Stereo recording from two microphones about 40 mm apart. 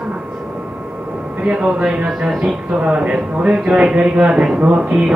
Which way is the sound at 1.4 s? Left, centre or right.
Right.